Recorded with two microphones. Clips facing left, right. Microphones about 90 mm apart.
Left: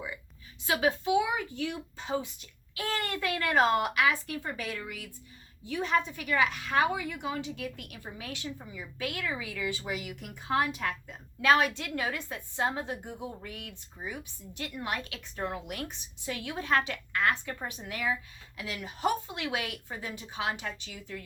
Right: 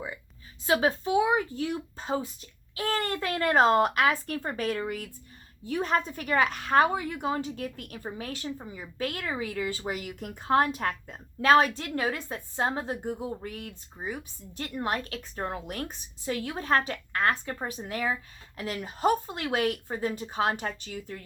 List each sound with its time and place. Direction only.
0.7 s a woman's voice: 30° right (ahead or behind)